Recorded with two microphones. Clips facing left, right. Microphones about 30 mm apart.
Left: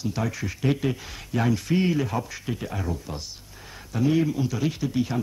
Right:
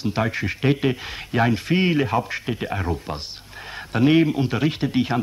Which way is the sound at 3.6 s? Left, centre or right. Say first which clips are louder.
Right 6 dB; right.